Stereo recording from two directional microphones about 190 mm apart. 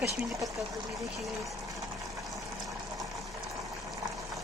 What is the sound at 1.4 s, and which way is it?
Water, 15° right (ahead or behind).